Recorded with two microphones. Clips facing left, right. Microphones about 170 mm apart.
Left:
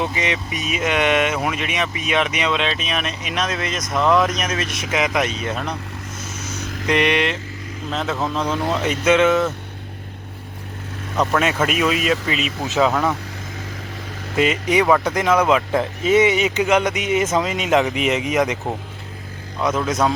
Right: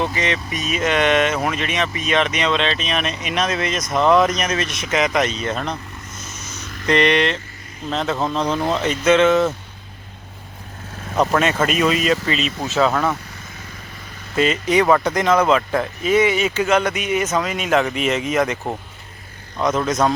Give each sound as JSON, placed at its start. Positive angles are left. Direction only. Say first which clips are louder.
{"t": 0.0, "sound": "speech", "louder": "right 1 dB", "side_deg": 10}
{"t": 6.8, "sound": "speech", "louder": "right 2 dB", "side_deg": 10}
{"t": 11.3, "sound": "speech", "louder": "right 1 dB", "side_deg": 5}
{"t": 14.3, "sound": "speech", "louder": "right 1 dB", "side_deg": 15}
{"t": 15.8, "sound": "speech", "louder": "left 1 dB", "side_deg": 20}
{"t": 19.6, "sound": "speech", "louder": "right 1 dB", "side_deg": 5}